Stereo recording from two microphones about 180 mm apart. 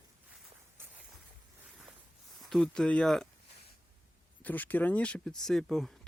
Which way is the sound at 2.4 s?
Centre (ahead or behind).